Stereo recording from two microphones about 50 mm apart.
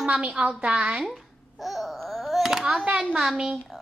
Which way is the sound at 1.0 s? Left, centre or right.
Centre.